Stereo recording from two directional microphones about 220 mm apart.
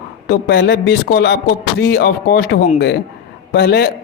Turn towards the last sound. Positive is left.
turn(degrees=45)  # may be behind; listen again after turning